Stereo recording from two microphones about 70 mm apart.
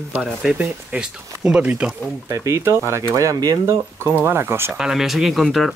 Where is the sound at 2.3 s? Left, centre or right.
Right.